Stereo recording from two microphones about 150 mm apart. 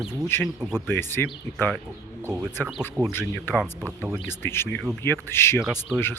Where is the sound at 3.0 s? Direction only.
15° left (ahead or behind).